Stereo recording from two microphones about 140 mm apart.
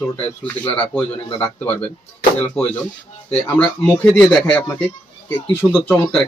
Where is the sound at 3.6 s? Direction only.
10° left (ahead or behind).